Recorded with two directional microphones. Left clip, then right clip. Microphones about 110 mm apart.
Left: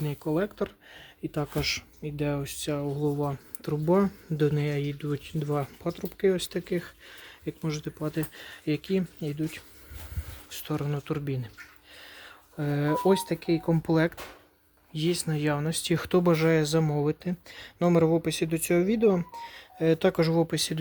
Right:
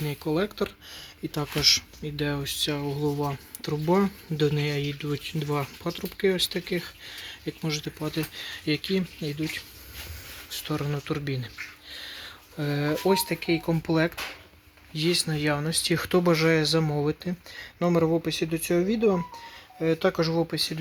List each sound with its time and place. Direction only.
0.0 s speech: 5° left (ahead or behind)
10.5 s speech: 15° left (ahead or behind)
10.8 s speech: centre (ahead or behind)
13.1 s speech: 30° left (ahead or behind)
14.9 s speech: 15° left (ahead or behind)
16.8 s speech: 10° left (ahead or behind)
17.5 s speech: 25° left (ahead or behind)
19.5 s speech: 40° left (ahead or behind); by 20.4 s 60° left (ahead or behind)
20.4 s speech: 45° left (ahead or behind)